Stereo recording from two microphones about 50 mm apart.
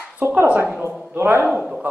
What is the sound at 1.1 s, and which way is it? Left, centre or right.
Speech, right.